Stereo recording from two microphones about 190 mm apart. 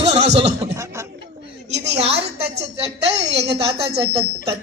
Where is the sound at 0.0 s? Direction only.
35° right (ahead or behind).